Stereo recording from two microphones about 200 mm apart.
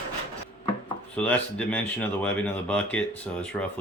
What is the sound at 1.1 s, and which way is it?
Speech, 5° left (ahead or behind).